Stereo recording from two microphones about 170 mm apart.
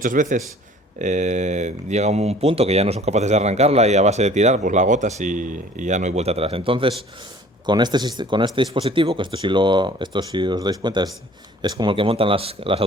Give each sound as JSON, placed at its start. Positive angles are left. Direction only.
{"t": 0.0, "sound": "a man's voice", "side_deg": -50}